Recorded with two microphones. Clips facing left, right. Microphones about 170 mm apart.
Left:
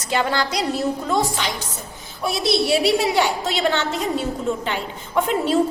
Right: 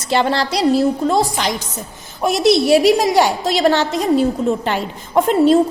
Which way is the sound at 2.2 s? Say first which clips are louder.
Right 7 dB; 45° right (ahead or behind).